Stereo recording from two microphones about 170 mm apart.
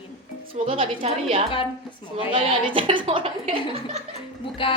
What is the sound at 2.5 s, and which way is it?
Speech, 30° right (ahead or behind).